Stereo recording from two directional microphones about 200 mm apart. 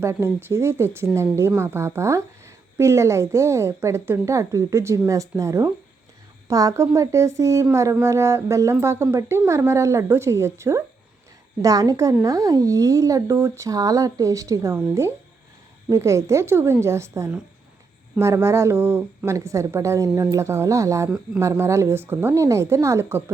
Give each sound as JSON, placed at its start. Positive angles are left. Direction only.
{"t": 0.0, "sound": "speech", "side_deg": -10}